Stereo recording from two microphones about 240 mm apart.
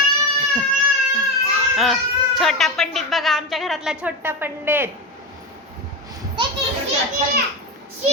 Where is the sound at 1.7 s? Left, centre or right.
Centre.